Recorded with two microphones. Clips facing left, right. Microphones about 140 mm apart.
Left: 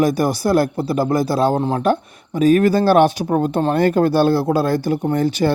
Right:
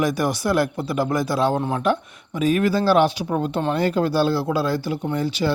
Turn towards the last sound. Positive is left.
turn(degrees=50)  # may be behind; listen again after turning